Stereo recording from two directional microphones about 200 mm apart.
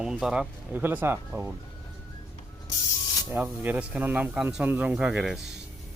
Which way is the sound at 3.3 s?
10° right (ahead or behind).